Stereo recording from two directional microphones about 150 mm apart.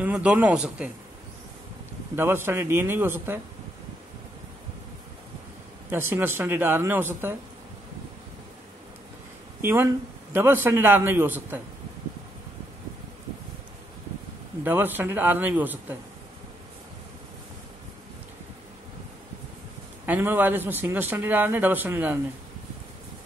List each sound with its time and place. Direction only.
0.0 s speech: 10° right (ahead or behind)
2.1 s speech: 15° right (ahead or behind)
5.9 s speech: 15° right (ahead or behind)
9.6 s speech: 15° right (ahead or behind)
14.6 s speech: 10° right (ahead or behind)
20.1 s speech: 15° right (ahead or behind)